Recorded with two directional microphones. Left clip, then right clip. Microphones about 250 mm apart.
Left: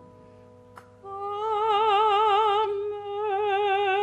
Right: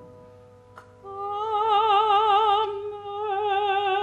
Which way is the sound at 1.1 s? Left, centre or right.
Left.